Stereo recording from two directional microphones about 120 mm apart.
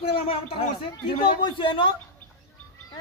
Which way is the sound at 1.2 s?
45° left (ahead or behind).